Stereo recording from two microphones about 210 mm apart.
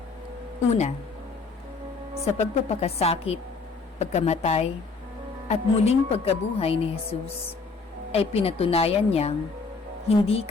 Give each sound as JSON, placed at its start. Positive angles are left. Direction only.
{"t": 0.7, "sound": "a woman's voice", "side_deg": 30}
{"t": 2.2, "sound": "a woman's voice", "side_deg": 30}